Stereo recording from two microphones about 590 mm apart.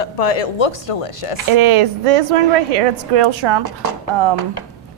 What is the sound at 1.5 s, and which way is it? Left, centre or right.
A woman's voice, right.